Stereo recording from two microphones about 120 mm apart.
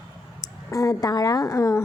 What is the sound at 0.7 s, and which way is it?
A woman's voice, 30° left (ahead or behind).